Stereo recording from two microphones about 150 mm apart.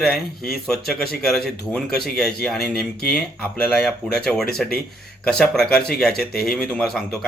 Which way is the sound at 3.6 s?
5° left (ahead or behind).